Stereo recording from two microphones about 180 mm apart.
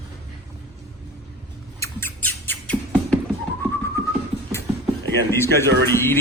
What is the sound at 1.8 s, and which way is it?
Rodents, 10° left (ahead or behind).